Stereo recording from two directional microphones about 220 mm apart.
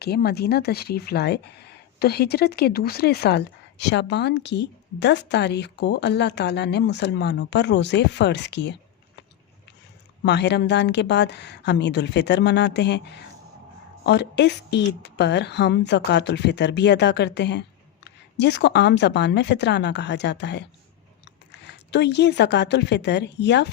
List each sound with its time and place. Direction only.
0.0 s speech: 45° left (ahead or behind)
10.2 s speech: 50° left (ahead or behind)
21.7 s speech: 50° left (ahead or behind)